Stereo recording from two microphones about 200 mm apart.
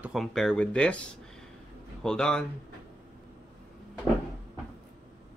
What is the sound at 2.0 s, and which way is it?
Speech, 5° left (ahead or behind).